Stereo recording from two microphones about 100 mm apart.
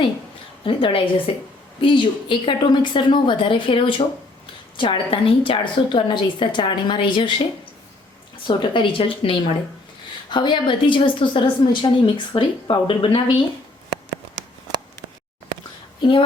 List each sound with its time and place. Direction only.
0.6 s a woman's voice: 60° left (ahead or behind)
1.8 s a woman's voice: 55° left (ahead or behind)
8.4 s a woman's voice: 55° left (ahead or behind)
10.2 s a woman's voice: 50° left (ahead or behind)
16.0 s speech: 55° left (ahead or behind)